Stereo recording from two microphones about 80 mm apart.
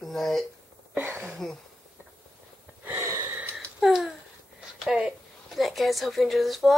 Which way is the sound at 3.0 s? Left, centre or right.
Right.